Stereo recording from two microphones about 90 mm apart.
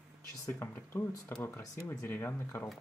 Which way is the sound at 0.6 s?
25° left (ahead or behind).